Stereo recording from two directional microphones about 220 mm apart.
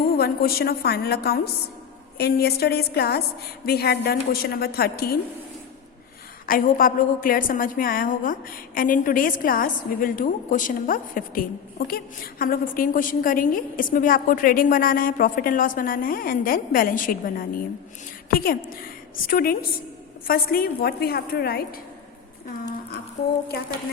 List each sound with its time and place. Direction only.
0.2 s a woman's voice: 45° left (ahead or behind)
6.4 s a woman's voice: 40° left (ahead or behind)